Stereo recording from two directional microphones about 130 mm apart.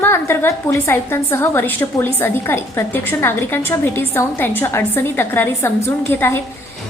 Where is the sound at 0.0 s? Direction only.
20° left (ahead or behind).